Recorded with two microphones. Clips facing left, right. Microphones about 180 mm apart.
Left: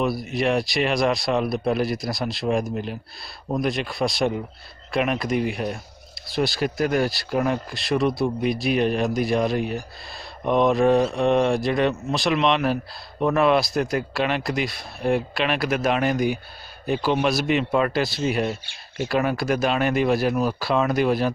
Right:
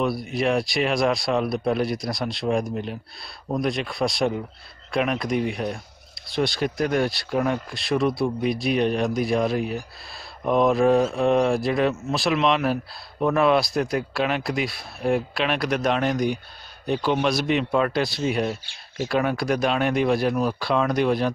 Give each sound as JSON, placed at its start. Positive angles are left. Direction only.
{"t": 0.0, "sound": "speech", "side_deg": 0}